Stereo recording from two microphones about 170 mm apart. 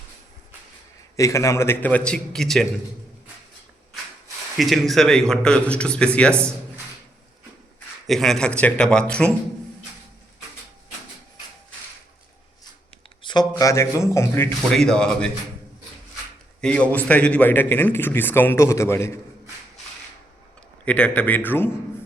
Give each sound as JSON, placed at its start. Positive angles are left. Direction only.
{"t": 1.1, "sound": "a man's voice", "side_deg": 20}
{"t": 4.5, "sound": "a man's voice", "side_deg": 0}
{"t": 8.0, "sound": "a man's voice", "side_deg": 0}
{"t": 13.2, "sound": "a man's voice", "side_deg": 25}
{"t": 14.8, "sound": "a man's voice", "side_deg": 5}
{"t": 16.6, "sound": "a man's voice", "side_deg": 5}
{"t": 20.8, "sound": "a man's voice", "side_deg": 5}